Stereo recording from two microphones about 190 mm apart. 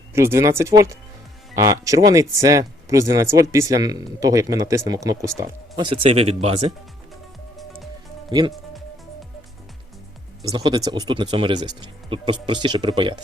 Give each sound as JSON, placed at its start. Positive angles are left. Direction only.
{"t": 0.1, "sound": "speech", "side_deg": -15}
{"t": 7.5, "sound": "music", "side_deg": 0}
{"t": 8.3, "sound": "speech", "side_deg": -25}
{"t": 10.4, "sound": "speech", "side_deg": -20}